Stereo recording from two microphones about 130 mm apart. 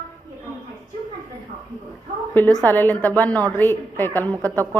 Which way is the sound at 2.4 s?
15° left (ahead or behind).